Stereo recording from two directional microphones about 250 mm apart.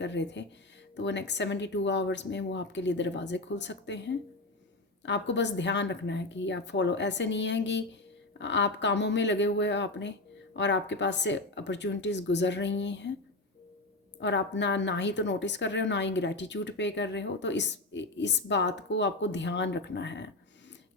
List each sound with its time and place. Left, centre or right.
0.0 s a woman's voice: left
14.2 s a woman's voice: left